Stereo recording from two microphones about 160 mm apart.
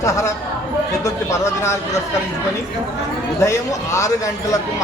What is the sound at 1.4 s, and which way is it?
Speech, 15° left (ahead or behind).